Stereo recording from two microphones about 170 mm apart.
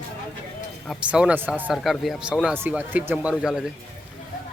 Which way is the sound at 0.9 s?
5° right (ahead or behind).